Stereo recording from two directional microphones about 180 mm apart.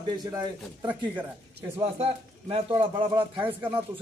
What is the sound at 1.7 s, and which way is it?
A man's voice, 35° right (ahead or behind).